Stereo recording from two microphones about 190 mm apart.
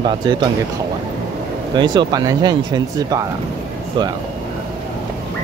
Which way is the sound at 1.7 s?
25° right (ahead or behind).